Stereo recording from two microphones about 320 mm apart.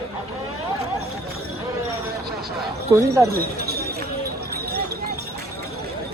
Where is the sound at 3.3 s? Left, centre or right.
Right.